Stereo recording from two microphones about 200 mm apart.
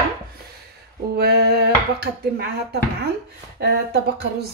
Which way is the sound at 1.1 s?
55° right (ahead or behind).